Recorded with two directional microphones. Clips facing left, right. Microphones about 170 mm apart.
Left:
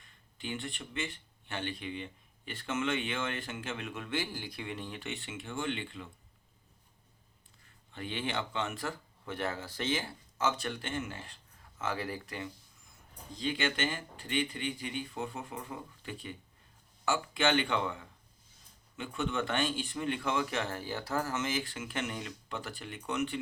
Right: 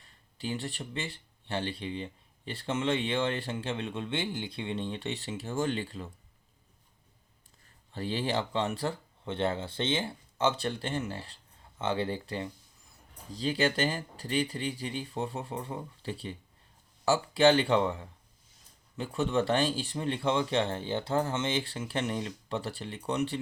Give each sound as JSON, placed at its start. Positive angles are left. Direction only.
{"t": 0.0, "sound": "speech", "side_deg": -35}
{"t": 7.9, "sound": "speech", "side_deg": -35}